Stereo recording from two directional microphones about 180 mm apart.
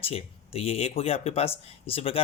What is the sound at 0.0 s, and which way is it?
Speech, 30° left (ahead or behind).